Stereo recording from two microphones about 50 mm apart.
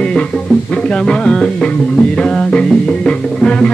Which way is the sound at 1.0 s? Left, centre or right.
Centre.